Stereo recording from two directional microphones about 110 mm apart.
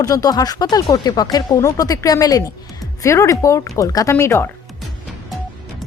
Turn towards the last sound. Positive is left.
turn(degrees=25)  # may be behind; listen again after turning